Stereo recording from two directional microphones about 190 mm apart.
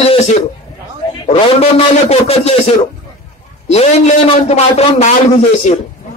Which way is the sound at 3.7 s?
35° left (ahead or behind).